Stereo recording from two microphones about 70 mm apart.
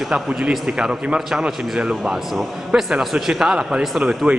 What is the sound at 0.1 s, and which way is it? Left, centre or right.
A man's voice, centre.